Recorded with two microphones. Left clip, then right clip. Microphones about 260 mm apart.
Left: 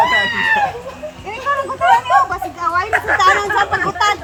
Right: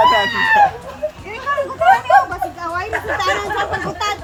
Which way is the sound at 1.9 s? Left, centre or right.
Centre.